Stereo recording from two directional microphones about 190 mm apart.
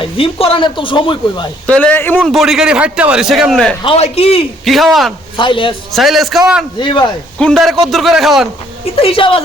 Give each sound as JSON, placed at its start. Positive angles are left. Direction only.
{"t": 0.0, "sound": "speech", "side_deg": 30}
{"t": 1.6, "sound": "a man's voice", "side_deg": 5}
{"t": 3.8, "sound": "speech", "side_deg": 30}
{"t": 4.6, "sound": "a man's voice", "side_deg": 0}
{"t": 5.4, "sound": "speech", "side_deg": 25}
{"t": 5.9, "sound": "a man's voice", "side_deg": 0}
{"t": 6.7, "sound": "speech", "side_deg": 25}
{"t": 7.3, "sound": "a man's voice", "side_deg": 5}
{"t": 9.0, "sound": "speech", "side_deg": 30}